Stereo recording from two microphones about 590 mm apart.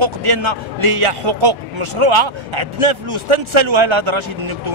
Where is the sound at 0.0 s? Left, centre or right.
Right.